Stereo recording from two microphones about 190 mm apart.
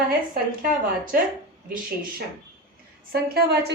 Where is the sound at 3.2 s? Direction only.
55° right (ahead or behind).